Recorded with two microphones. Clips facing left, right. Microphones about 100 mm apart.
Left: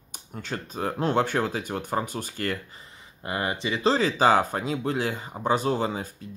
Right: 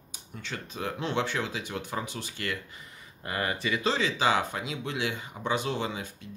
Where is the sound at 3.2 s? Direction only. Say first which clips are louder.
Left 2 dB; 25° left (ahead or behind).